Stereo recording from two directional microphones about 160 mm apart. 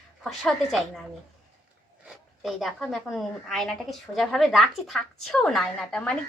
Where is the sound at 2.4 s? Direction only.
Centre (ahead or behind).